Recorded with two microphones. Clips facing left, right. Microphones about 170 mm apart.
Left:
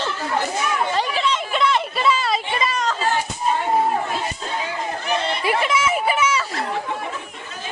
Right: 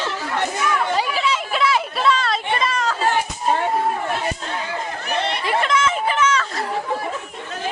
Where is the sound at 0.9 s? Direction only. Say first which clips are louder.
Even; 5° right (ahead or behind).